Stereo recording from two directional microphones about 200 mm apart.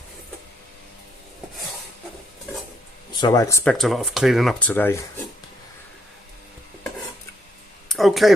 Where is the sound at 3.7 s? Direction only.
Centre (ahead or behind).